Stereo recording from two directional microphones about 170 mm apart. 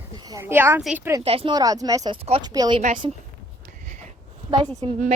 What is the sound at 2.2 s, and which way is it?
Speech, 35° right (ahead or behind).